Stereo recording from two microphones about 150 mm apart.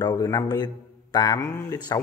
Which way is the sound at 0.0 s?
25° left (ahead or behind).